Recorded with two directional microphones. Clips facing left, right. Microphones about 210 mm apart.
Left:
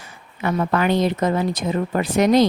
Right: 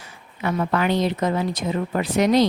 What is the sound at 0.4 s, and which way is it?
Speech, 50° left (ahead or behind).